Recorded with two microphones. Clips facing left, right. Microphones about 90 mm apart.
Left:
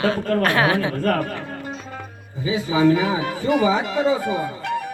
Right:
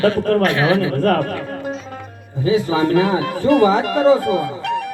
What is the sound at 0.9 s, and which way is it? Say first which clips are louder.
Speech: right 5 dB; 90° right.